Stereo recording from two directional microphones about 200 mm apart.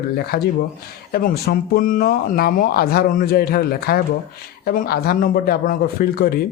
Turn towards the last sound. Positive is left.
turn(degrees=50)  # may be behind; listen again after turning